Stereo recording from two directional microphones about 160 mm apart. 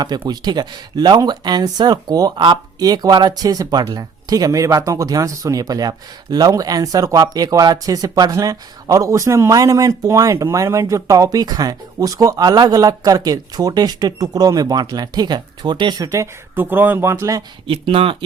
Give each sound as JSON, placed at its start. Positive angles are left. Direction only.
{"t": 0.3, "sound": "speech", "side_deg": -25}
{"t": 17.7, "sound": "speech", "side_deg": -35}